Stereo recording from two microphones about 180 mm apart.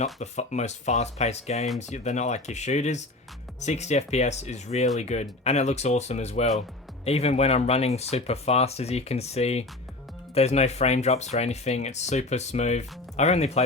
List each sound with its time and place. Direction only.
0.0 s speech: 40° left (ahead or behind)